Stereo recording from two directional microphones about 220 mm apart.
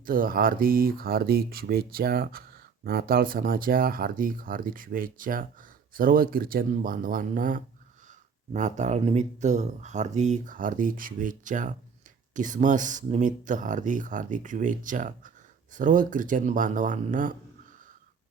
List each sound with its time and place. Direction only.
0.0 s speech: 40° right (ahead or behind)